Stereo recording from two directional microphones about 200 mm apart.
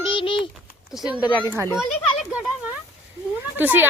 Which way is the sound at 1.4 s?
10° right (ahead or behind).